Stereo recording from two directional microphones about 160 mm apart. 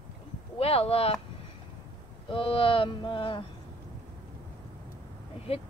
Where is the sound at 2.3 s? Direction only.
35° left (ahead or behind).